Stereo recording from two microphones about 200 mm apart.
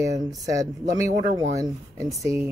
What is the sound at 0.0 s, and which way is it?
Speech, 15° right (ahead or behind).